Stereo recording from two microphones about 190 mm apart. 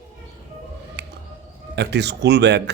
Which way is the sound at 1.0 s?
65° right (ahead or behind).